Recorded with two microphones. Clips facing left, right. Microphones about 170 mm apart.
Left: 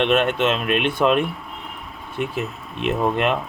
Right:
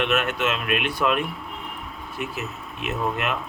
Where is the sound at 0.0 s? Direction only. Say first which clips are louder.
Left 5 dB; 30° left (ahead or behind).